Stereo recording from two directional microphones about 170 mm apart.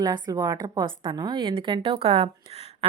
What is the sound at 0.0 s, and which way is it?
A woman's voice, 25° right (ahead or behind).